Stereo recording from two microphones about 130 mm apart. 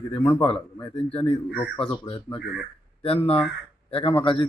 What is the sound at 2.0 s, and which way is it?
Speech, 40° left (ahead or behind).